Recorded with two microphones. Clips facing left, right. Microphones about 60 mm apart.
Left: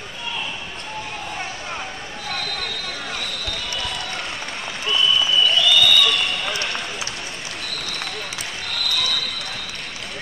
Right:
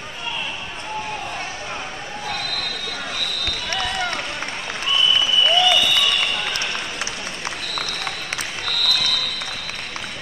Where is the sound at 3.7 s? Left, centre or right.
Right.